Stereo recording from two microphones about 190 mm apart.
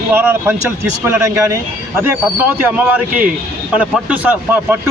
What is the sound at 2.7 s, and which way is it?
Speech, 5° right (ahead or behind).